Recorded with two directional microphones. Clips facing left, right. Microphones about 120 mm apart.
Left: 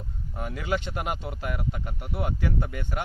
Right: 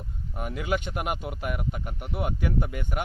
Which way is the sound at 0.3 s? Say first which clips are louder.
Right 1 dB; 20° right (ahead or behind).